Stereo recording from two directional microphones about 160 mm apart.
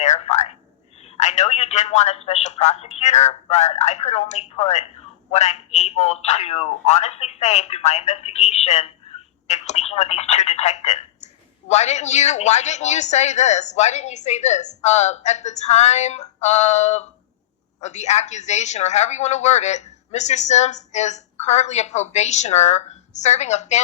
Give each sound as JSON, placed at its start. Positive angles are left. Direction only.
{"t": 0.0, "sound": "telephone", "side_deg": 45}
{"t": 1.1, "sound": "a woman's voice", "side_deg": 45}